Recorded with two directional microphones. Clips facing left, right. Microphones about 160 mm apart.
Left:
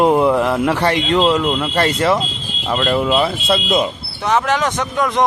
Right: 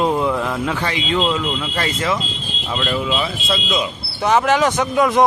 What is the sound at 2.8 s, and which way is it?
Speech, 50° left (ahead or behind).